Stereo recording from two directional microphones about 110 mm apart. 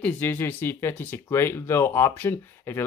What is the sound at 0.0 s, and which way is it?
Speech, 20° left (ahead or behind).